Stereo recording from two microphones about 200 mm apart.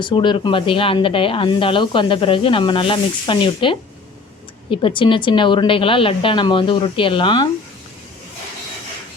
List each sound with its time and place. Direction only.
0.0 s speech: 25° left (ahead or behind)